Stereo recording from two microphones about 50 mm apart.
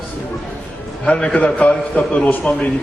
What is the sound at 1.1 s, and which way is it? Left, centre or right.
A man's voice, left.